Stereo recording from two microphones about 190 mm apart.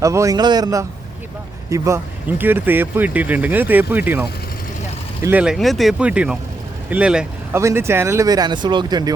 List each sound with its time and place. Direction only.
0.0 s speech: 15° right (ahead or behind)